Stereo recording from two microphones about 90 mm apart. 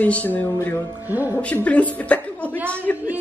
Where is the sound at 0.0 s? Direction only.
20° left (ahead or behind).